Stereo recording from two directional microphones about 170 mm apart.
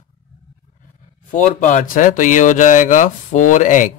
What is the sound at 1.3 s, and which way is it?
Speech, 50° left (ahead or behind).